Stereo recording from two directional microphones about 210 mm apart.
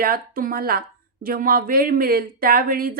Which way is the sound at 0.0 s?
45° right (ahead or behind).